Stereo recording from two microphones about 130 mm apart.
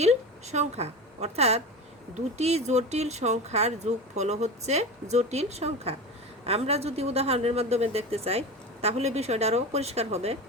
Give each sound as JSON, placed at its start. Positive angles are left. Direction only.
{"t": 0.0, "sound": "a woman's voice", "side_deg": -60}